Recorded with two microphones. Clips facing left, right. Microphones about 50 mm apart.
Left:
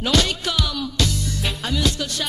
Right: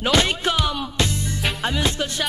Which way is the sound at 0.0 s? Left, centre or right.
Right.